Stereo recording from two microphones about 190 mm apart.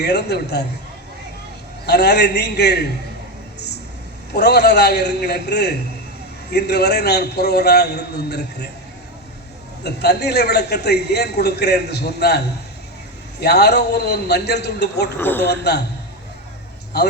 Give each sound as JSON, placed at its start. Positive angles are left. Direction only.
{"t": 0.0, "sound": "a man's voice", "side_deg": 60}
{"t": 1.9, "sound": "a man's voice", "side_deg": 60}
{"t": 4.4, "sound": "a man's voice", "side_deg": 60}
{"t": 9.8, "sound": "a man's voice", "side_deg": 60}
{"t": 13.4, "sound": "a man's voice", "side_deg": 60}
{"t": 15.2, "sound": "a man's voice", "side_deg": 10}
{"t": 15.4, "sound": "a man's voice", "side_deg": 60}
{"t": 16.9, "sound": "a man's voice", "side_deg": 60}